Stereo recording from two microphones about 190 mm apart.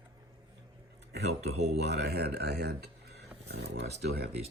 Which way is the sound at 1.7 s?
60° right (ahead or behind).